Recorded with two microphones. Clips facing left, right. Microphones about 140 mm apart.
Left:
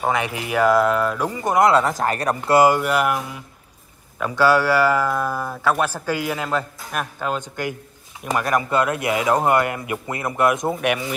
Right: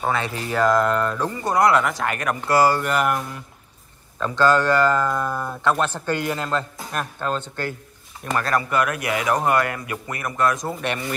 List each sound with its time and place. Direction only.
0.0 s speech: 15° left (ahead or behind); by 2.5 s 35° left (ahead or behind)
2.5 s a man's voice: 20° left (ahead or behind)
2.8 s mantra: 5° left (ahead or behind)
4.2 s a man's voice: 10° left (ahead or behind)
10.7 s mantra: 5° left (ahead or behind)